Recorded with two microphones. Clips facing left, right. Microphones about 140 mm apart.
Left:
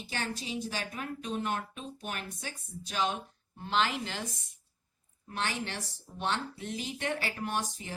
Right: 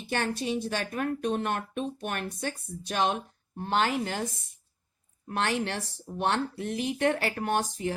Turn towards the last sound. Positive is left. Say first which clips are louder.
# right 7 dB
turn(degrees=-60)  # may be behind; listen again after turning